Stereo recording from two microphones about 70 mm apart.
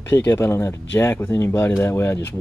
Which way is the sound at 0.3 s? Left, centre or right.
Left.